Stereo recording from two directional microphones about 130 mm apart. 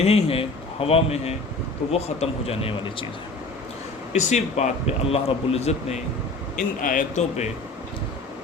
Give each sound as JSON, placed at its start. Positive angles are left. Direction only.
{"t": 0.0, "sound": "a man's voice", "side_deg": 50}
{"t": 4.3, "sound": "a man's voice", "side_deg": 60}
{"t": 6.6, "sound": "a man's voice", "side_deg": 90}